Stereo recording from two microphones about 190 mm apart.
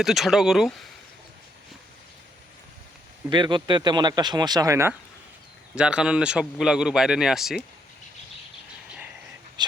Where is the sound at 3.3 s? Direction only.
25° right (ahead or behind).